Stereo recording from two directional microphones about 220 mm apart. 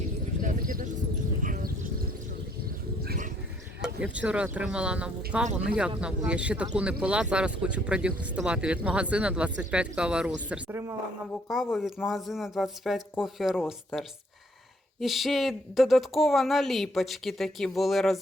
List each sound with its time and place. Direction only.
0.4 s clip-clop: 40° right (ahead or behind)
1.4 s a sound: 40° right (ahead or behind)
3.0 s a sound: 40° right (ahead or behind)
4.0 s speech: 5° right (ahead or behind)
11.4 s speech: centre (ahead or behind)
15.0 s speech: centre (ahead or behind)